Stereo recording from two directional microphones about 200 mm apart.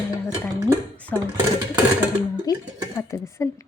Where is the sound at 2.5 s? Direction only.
15° left (ahead or behind).